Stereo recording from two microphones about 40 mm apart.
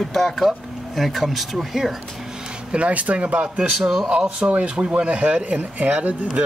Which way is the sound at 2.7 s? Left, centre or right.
Right.